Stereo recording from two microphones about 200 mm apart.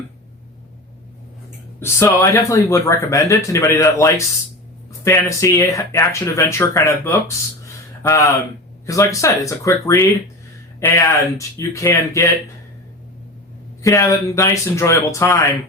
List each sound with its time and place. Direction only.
1.8 s speech: 15° left (ahead or behind)
13.8 s speech: 15° left (ahead or behind)